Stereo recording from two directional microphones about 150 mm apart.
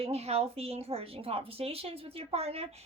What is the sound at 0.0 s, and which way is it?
A woman's voice, 45° right (ahead or behind).